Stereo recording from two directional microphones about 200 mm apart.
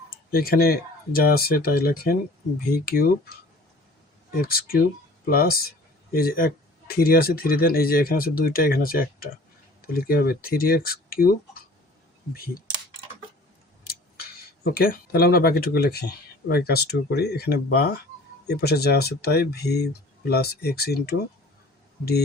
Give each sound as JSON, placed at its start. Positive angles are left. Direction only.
{"t": 0.3, "sound": "speech", "side_deg": 50}
{"t": 13.8, "sound": "a sound", "side_deg": 50}
{"t": 16.5, "sound": "speech", "side_deg": 50}